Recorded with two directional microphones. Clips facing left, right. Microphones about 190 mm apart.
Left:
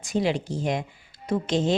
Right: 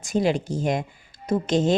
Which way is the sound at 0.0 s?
45° right (ahead or behind).